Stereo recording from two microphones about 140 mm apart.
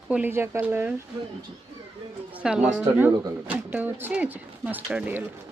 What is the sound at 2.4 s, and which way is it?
Speech, 5° right (ahead or behind).